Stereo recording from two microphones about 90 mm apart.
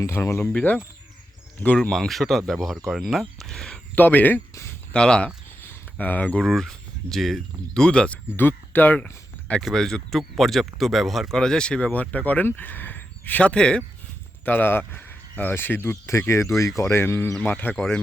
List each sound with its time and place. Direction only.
0.0 s speech: 30° left (ahead or behind)
0.5 s speech: 15° left (ahead or behind)
3.9 s speech: 20° left (ahead or behind)
4.5 s cricket: 30° left (ahead or behind)
4.9 s speech: 10° left (ahead or behind)
5.6 s a sound: 20° left (ahead or behind)
6.4 s speech: 5° left (ahead or behind)
8.4 s speech: 25° left (ahead or behind)
14.4 s speech: 20° left (ahead or behind)